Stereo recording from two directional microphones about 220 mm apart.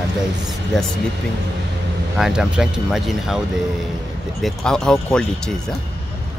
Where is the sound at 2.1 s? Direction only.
5° right (ahead or behind).